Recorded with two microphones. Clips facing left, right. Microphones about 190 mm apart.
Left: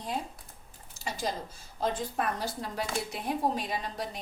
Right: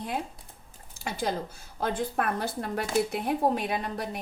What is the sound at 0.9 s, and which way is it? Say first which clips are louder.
Speech: right 4 dB; 55° right (ahead or behind).